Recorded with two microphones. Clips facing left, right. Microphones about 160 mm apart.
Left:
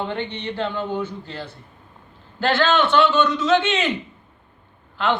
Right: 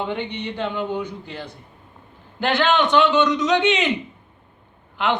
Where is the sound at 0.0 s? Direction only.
15° right (ahead or behind).